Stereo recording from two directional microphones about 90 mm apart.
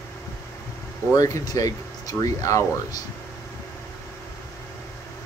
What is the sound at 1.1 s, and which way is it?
Speech, 40° left (ahead or behind).